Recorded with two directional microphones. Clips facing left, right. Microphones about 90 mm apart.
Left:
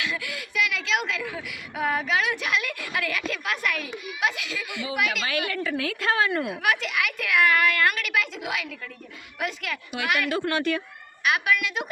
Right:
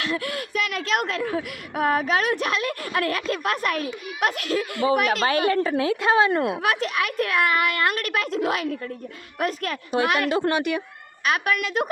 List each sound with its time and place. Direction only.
0.0 s speech: 40° right (ahead or behind); by 6.3 s 20° right (ahead or behind)
6.6 s speech: 35° right (ahead or behind)
8.1 s speech: 40° right (ahead or behind)
10.5 s speech: 15° right (ahead or behind)
11.3 s a woman's voice: 45° right (ahead or behind)